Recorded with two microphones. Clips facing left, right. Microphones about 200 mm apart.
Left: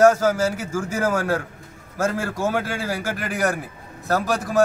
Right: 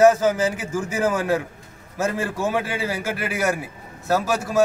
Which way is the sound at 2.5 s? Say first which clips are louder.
Even; 15° right (ahead or behind).